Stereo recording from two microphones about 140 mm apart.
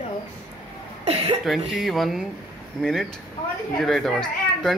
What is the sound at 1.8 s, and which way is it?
A man's voice, centre (ahead or behind).